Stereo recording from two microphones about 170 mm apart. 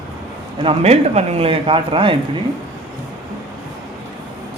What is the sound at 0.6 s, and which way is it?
Speech, 40° right (ahead or behind).